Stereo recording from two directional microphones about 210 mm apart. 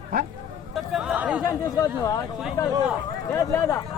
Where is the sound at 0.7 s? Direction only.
Centre (ahead or behind).